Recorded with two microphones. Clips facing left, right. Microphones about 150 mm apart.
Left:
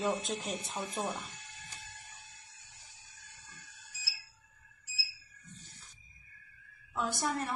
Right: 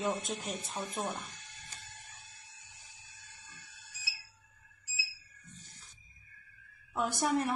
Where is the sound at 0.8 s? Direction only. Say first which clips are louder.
Left 1 dB; 25° left (ahead or behind).